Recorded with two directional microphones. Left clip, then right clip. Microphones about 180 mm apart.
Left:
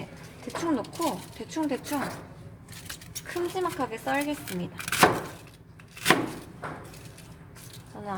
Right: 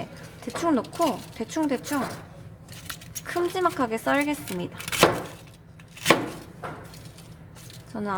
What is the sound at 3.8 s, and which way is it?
Speech, 30° right (ahead or behind).